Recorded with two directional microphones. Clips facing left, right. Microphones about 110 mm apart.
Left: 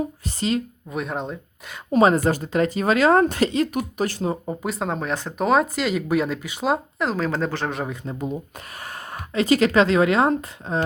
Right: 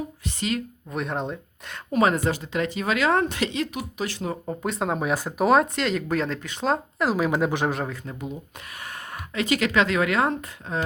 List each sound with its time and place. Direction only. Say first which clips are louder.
0.3 s speech: left 3 dB; 35° left (ahead or behind)
0.9 s speech: right 2 dB; centre (ahead or behind)
1.9 s speech: left 4 dB; 30° left (ahead or behind)
4.4 s speech: even; centre (ahead or behind)
7.1 s speech: right 2 dB; 10° right (ahead or behind)
8.8 s speech: left 2 dB; 35° left (ahead or behind)